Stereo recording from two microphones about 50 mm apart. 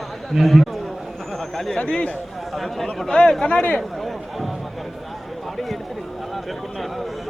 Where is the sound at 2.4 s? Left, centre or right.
Centre.